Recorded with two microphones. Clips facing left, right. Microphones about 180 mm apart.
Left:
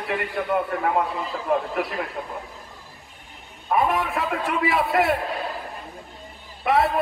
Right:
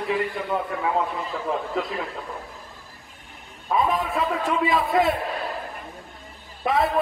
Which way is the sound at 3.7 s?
75° left (ahead or behind).